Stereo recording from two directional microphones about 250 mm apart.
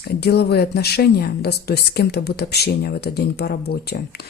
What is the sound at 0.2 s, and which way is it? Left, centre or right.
Speech, left.